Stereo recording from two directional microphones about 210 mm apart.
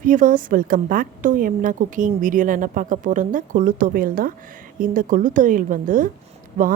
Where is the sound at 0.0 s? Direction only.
40° right (ahead or behind).